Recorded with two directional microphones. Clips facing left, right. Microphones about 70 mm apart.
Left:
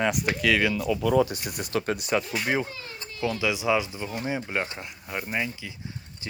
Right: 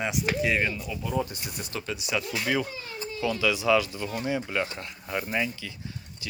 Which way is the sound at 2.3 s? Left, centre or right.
Left.